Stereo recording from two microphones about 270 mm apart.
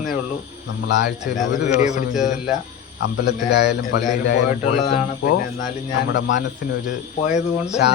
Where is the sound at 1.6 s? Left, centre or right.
Left.